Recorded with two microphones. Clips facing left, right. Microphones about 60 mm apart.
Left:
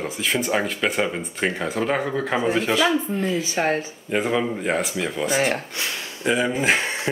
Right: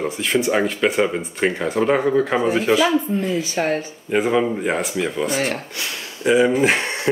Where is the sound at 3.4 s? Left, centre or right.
Left.